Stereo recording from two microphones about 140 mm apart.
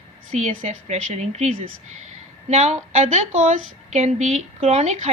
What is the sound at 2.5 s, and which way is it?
Speech, 55° right (ahead or behind).